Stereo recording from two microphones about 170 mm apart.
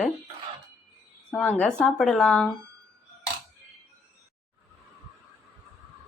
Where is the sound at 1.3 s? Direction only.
5° left (ahead or behind).